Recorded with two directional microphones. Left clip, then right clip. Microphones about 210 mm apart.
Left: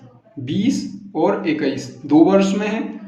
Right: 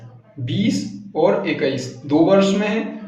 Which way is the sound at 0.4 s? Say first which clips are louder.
Left 1 dB; 35° left (ahead or behind).